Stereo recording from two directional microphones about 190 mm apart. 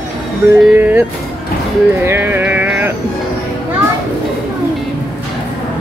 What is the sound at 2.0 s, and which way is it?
Music, 10° right (ahead or behind).